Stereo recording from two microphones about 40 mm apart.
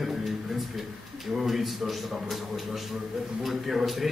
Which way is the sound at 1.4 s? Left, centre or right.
Centre.